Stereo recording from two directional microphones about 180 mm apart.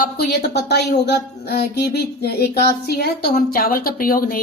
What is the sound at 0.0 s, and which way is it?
A woman's voice, 60° left (ahead or behind).